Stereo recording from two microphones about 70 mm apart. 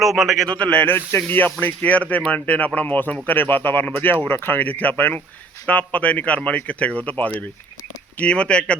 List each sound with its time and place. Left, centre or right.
0.0 s a man's voice: centre
0.5 s speech: centre